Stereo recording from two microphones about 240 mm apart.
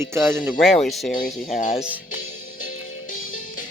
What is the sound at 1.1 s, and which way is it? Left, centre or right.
Speech, left.